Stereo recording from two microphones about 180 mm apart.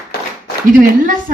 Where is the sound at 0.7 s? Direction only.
45° right (ahead or behind).